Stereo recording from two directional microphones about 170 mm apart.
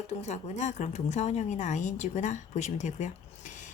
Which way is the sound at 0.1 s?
40° left (ahead or behind).